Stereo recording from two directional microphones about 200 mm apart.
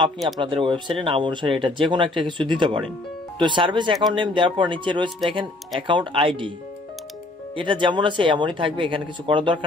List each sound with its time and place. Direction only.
0.4 s speech: 25° right (ahead or behind)
7.5 s speech: 25° right (ahead or behind)